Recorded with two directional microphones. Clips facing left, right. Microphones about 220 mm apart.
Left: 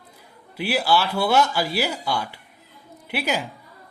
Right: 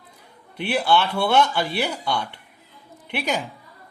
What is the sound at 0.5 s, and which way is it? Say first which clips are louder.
Speech: right 1 dB; 5° left (ahead or behind).